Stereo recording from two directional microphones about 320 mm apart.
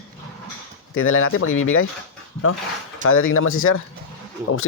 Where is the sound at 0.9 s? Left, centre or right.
Left.